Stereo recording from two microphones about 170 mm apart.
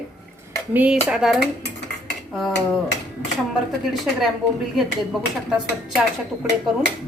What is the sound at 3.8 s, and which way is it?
Speech, centre (ahead or behind).